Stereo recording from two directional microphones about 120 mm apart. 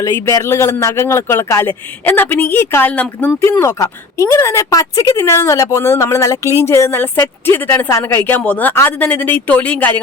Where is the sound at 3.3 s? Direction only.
20° left (ahead or behind).